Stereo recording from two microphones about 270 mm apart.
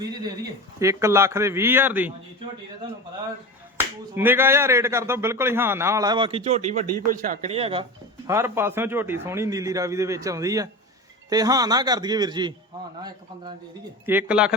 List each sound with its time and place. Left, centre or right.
0.0 s speech: centre
3.8 s speech: centre
8.3 s speech: centre